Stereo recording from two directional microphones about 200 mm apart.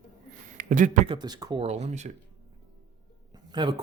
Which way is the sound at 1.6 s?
35° right (ahead or behind).